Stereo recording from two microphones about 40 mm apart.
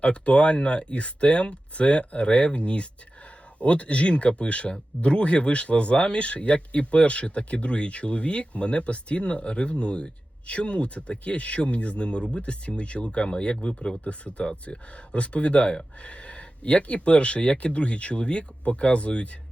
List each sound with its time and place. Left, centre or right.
0.0 s speech: left